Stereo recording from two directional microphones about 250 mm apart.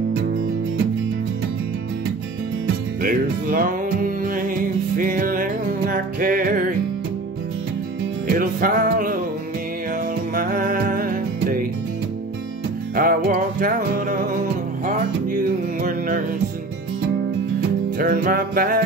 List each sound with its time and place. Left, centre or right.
3.0 s music: right
8.3 s music: right
10.3 s music: right
12.9 s music: right
17.9 s music: right